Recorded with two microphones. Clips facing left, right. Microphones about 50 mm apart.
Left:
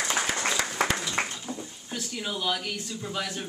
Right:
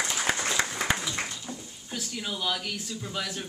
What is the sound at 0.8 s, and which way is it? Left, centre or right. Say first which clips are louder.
Applause: left 4 dB; left.